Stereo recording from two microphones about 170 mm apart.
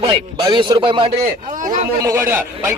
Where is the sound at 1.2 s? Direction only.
50° right (ahead or behind).